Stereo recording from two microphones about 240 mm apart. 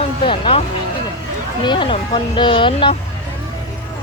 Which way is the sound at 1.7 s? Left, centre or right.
Left.